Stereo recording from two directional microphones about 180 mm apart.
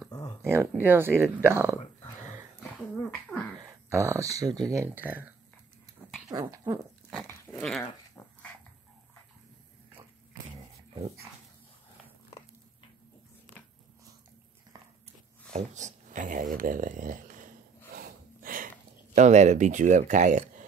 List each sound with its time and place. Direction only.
0.4 s speech: 15° right (ahead or behind)
3.3 s a sound: centre (ahead or behind)
3.6 s speech: 15° right (ahead or behind)
7.2 s dog: 5° left (ahead or behind)
15.5 s speech: 40° right (ahead or behind)
17.9 s snort: 55° right (ahead or behind)
19.1 s speech: 40° right (ahead or behind)